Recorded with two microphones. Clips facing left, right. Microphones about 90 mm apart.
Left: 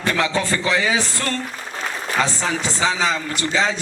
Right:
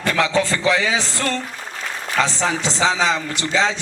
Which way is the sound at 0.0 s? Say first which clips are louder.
Right 2 dB; 25° left (ahead or behind).